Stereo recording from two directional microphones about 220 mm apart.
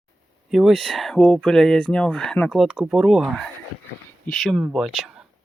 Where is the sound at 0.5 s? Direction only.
Centre (ahead or behind).